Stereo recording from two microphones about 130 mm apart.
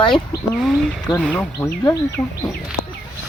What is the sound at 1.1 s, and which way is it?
Speech, 10° left (ahead or behind).